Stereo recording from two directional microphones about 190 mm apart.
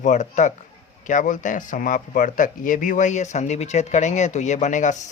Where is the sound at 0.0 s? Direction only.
40° left (ahead or behind).